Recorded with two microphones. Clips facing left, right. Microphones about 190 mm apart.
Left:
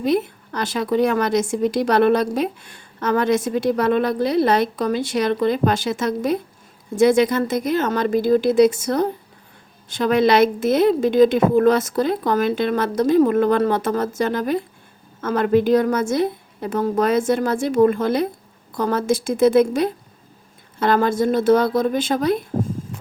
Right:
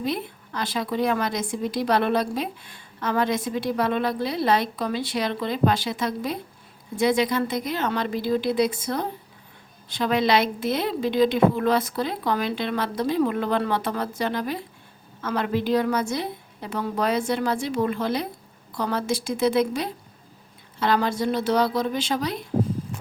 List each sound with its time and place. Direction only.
0.0 s a woman's voice: 45° left (ahead or behind)